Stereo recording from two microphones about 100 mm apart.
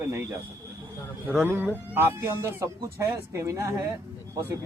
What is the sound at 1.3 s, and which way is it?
Speech, 15° right (ahead or behind).